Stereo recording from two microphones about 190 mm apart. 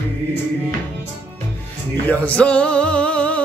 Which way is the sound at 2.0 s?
10° left (ahead or behind).